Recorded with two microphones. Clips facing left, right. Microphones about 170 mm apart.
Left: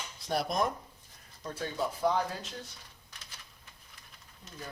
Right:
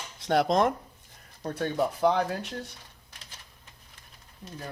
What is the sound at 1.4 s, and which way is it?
Speech, 60° right (ahead or behind).